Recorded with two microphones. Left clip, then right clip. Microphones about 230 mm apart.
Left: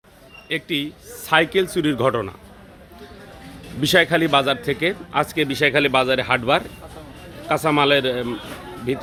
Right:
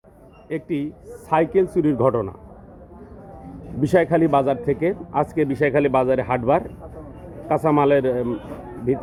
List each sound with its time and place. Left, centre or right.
0.4 s a man's voice: centre
3.8 s a man's voice: centre